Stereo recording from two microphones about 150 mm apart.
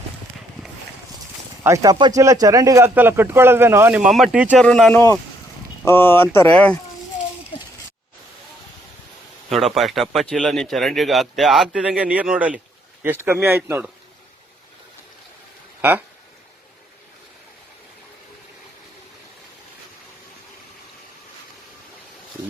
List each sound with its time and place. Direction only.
1.6 s speech: 20° right (ahead or behind); by 6.7 s 10° left (ahead or behind)
7.5 s a sound: 30° left (ahead or behind)
9.5 s speech: centre (ahead or behind)
15.8 s speech: 15° right (ahead or behind)